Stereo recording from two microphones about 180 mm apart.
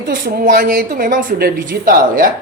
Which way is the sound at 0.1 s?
50° right (ahead or behind).